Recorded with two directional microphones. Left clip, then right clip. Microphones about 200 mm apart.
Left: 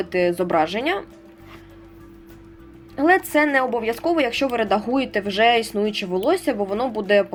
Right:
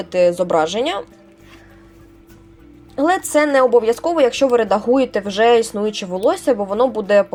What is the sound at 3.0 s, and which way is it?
A woman's voice, 30° right (ahead or behind).